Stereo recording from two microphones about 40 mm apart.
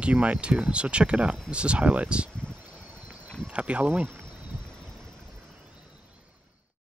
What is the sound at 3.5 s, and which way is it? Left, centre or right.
Speech, right.